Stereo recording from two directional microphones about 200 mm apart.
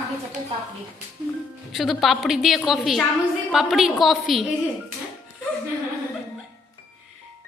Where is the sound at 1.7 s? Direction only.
Centre (ahead or behind).